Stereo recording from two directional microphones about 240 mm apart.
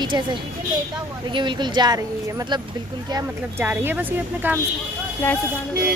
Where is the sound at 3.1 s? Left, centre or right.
Centre.